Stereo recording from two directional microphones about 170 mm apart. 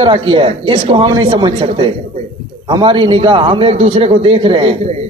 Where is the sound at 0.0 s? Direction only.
30° right (ahead or behind).